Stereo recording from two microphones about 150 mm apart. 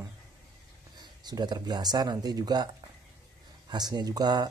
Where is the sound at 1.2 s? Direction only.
30° right (ahead or behind).